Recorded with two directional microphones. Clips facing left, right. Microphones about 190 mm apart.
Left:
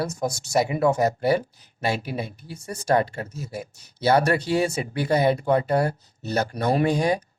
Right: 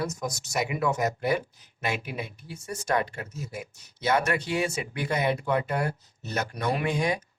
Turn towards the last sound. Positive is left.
turn(degrees=35)  # may be behind; listen again after turning